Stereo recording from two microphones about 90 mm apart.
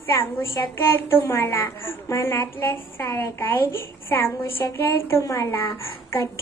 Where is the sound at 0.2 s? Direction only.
25° left (ahead or behind).